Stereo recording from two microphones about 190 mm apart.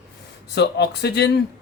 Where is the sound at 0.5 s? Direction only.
60° left (ahead or behind).